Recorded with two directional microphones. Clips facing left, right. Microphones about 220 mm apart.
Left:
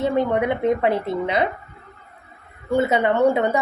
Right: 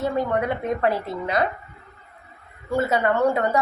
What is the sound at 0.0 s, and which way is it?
Speech, 20° left (ahead or behind).